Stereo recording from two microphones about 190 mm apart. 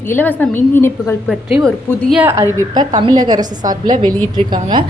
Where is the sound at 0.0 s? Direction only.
10° left (ahead or behind).